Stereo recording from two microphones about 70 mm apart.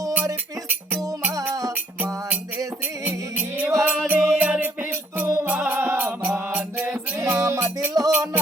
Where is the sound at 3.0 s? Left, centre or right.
Right.